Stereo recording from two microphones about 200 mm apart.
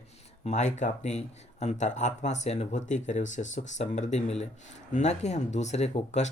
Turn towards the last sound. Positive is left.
turn(degrees=35)  # may be behind; listen again after turning